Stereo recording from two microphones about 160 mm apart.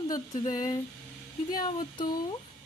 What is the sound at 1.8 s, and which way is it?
Speech, 30° left (ahead or behind).